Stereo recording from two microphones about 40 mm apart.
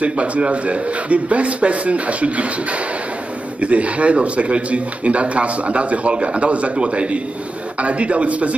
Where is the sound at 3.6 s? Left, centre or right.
Right.